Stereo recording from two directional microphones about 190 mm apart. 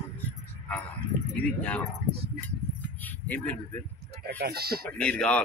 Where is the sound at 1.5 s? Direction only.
5° left (ahead or behind).